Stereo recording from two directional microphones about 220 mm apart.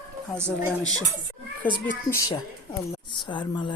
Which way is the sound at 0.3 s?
10° right (ahead or behind).